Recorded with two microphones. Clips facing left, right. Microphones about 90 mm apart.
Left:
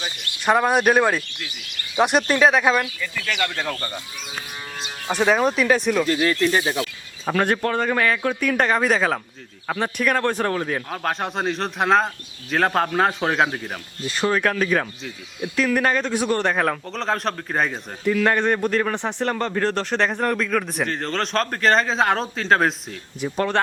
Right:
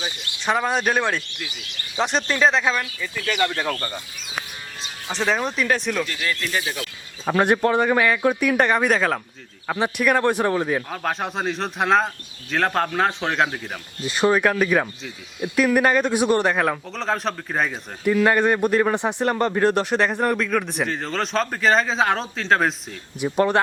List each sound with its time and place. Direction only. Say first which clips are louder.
0.4 s speech: left 4 dB; 10° left (ahead or behind)
3.0 s speech: right 1 dB; 15° right (ahead or behind)
5.1 s speech: left 4 dB; 10° left (ahead or behind)
6.1 s speech: left 7 dB; 35° left (ahead or behind)
7.3 s speech: right 3 dB; 20° right (ahead or behind); by 13.7 s 5° left (ahead or behind)
14.1 s speech: right 3 dB; 15° right (ahead or behind)
16.5 s speech: even; centre (ahead or behind)